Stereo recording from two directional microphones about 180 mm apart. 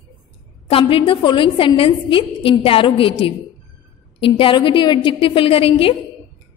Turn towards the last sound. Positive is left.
turn(degrees=30)  # may be behind; listen again after turning